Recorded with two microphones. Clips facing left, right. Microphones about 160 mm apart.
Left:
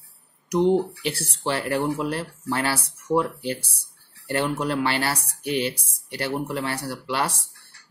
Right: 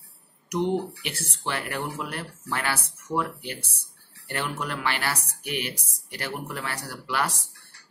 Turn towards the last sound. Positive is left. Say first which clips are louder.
# left 3 dB
turn(degrees=30)  # may be behind; listen again after turning